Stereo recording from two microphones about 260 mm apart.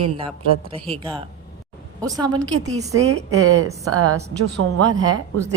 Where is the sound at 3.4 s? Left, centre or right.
Right.